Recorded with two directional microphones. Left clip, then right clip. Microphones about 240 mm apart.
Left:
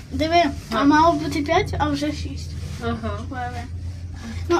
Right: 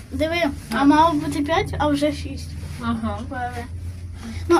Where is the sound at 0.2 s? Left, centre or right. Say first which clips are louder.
Left 3 dB; centre.